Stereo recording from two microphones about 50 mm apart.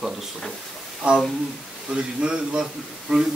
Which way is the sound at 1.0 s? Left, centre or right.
Right.